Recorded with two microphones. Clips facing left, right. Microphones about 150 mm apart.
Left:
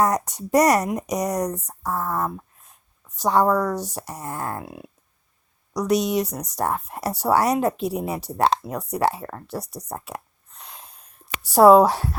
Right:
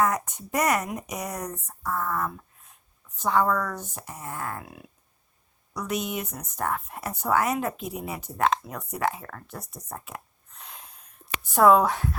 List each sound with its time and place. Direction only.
0.0 s a woman's voice: 40° left (ahead or behind)
10.6 s a sound: 35° left (ahead or behind)
11.5 s a woman's voice: 35° left (ahead or behind)